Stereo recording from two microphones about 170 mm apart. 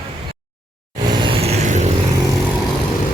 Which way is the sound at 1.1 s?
30° right (ahead or behind).